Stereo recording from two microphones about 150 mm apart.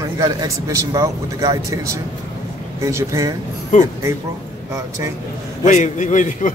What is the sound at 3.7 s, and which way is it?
Speech, 55° left (ahead or behind).